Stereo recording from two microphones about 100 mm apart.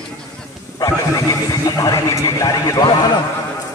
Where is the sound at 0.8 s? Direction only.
35° left (ahead or behind).